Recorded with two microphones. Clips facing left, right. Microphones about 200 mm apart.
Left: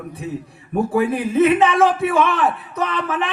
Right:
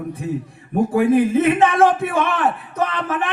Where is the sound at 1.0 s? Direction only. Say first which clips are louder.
Right 2 dB; 55° right (ahead or behind).